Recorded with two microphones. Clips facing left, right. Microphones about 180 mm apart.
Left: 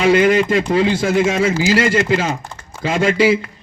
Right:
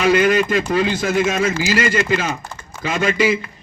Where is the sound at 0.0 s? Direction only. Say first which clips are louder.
Left 2 dB; 30° left (ahead or behind).